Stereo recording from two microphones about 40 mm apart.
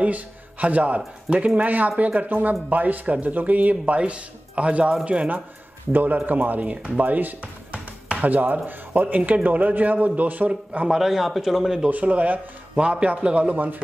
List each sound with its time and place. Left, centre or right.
0.0 s speech: right
1.6 s speech: right
4.0 s speech: right
5.9 s speech: right
10.5 s speech: right
11.0 s a man's voice: centre
11.9 s speech: right